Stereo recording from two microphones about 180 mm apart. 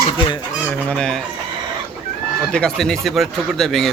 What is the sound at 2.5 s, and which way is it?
Speech, 5° left (ahead or behind).